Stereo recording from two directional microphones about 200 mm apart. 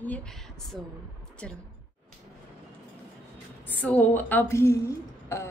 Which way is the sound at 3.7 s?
10° left (ahead or behind).